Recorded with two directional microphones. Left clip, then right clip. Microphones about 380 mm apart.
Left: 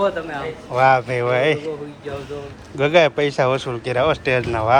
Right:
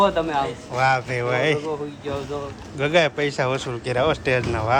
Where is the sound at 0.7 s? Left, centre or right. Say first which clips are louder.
Left 6 dB; centre.